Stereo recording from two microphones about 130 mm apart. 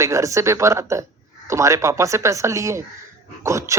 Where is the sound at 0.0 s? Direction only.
25° right (ahead or behind).